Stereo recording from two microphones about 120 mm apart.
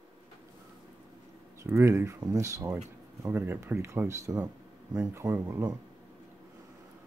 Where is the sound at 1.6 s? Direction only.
25° right (ahead or behind).